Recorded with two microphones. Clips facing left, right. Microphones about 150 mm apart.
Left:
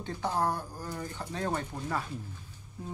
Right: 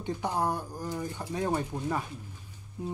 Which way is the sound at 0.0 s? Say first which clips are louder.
Right 1 dB; 15° right (ahead or behind).